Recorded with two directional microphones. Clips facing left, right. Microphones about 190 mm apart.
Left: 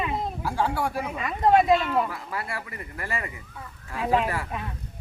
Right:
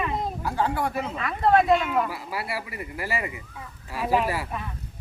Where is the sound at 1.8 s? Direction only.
5° right (ahead or behind).